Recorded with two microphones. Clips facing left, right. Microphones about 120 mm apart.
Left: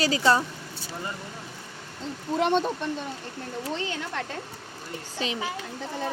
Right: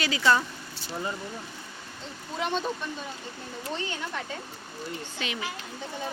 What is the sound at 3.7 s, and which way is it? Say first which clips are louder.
Speech: even; 90° left.